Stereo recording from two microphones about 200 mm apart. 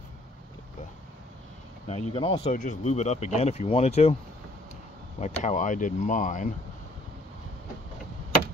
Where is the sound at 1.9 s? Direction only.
30° left (ahead or behind).